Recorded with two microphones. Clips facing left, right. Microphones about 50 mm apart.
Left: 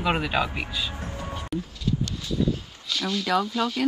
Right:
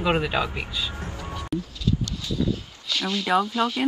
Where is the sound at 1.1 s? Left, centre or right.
Left.